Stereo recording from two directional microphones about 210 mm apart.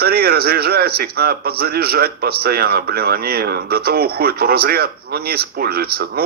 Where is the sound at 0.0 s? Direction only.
45° right (ahead or behind).